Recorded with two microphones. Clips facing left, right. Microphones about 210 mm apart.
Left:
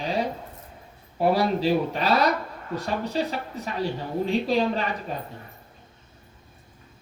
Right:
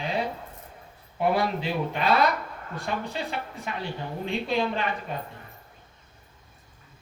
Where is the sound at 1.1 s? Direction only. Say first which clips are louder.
Left 3 dB; 35° left (ahead or behind).